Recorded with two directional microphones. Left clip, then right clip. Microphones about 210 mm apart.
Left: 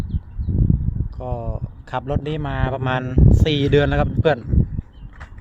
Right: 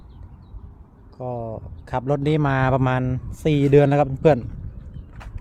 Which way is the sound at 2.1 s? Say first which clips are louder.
Right 5 dB; 35° right (ahead or behind).